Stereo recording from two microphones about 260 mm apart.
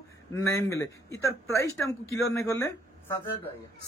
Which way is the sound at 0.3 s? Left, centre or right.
Centre.